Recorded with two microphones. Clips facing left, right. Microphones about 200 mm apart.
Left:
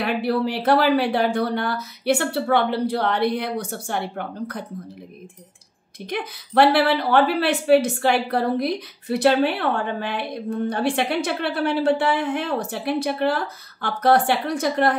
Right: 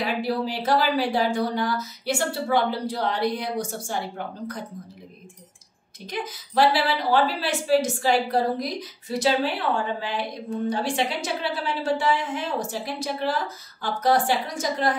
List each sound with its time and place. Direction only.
0.0 s a woman's voice: 60° left (ahead or behind)
6.0 s a woman's voice: 60° left (ahead or behind)